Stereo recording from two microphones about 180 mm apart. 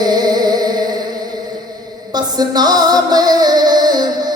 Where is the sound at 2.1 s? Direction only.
20° right (ahead or behind).